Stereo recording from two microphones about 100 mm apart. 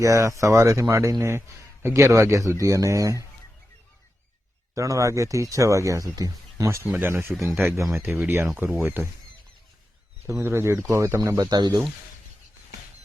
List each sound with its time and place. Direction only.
0.0 s speech: 30° right (ahead or behind)
4.7 s speech: 30° right (ahead or behind)
6.7 s speech: 25° right (ahead or behind)
7.3 s speech: centre (ahead or behind)
7.9 s speech: 20° right (ahead or behind)
10.2 s speech: 25° right (ahead or behind); by 11.8 s 45° right (ahead or behind)